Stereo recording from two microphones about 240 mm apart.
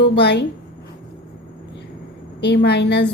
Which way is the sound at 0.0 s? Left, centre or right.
Left.